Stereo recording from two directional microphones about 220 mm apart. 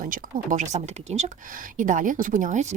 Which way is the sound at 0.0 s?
40° right (ahead or behind).